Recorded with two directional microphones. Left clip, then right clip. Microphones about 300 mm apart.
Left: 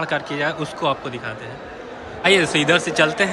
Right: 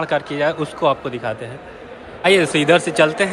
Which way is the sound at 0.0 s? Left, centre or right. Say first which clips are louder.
Right 3 dB; centre.